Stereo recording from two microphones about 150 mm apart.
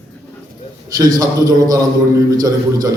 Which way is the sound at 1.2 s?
25° right (ahead or behind).